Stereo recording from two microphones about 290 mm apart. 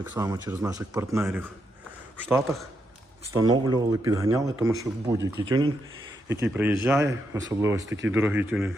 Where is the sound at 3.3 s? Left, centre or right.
Centre.